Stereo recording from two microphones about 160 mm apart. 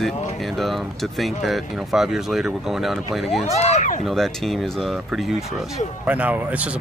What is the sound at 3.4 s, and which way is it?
Speech, 40° left (ahead or behind).